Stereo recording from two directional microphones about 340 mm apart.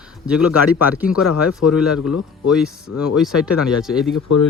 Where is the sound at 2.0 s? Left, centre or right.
Left.